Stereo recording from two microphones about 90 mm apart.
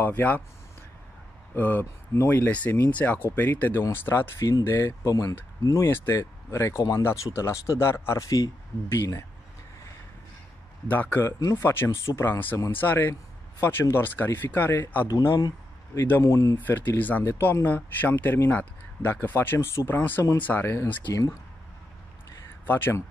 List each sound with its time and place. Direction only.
0.0 s speech: 20° left (ahead or behind)
1.5 s speech: 20° left (ahead or behind)
4.4 s speech: 40° left (ahead or behind)
4.6 s speech: 30° left (ahead or behind)
10.9 s speech: 20° left (ahead or behind)
16.1 s speech: 35° left (ahead or behind)
16.5 s speech: 20° left (ahead or behind)
22.7 s speech: 25° left (ahead or behind)